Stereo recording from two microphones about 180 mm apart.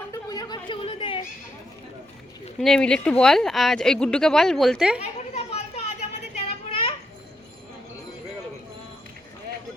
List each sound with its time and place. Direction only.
0.1 s a sound: 20° left (ahead or behind)
2.6 s speech: centre (ahead or behind)
5.3 s children playing: 35° left (ahead or behind)